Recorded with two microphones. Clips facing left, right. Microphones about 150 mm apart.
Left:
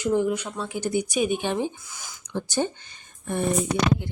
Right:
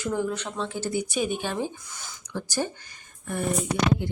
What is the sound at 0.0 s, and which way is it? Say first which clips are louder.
Speech: left 5 dB; 20° left (ahead or behind).